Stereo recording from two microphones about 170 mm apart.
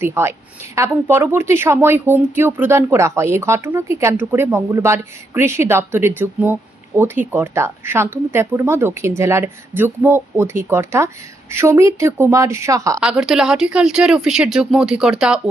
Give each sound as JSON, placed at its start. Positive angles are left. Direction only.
{"t": 0.0, "sound": "speech", "side_deg": -15}
{"t": 13.0, "sound": "speech", "side_deg": -5}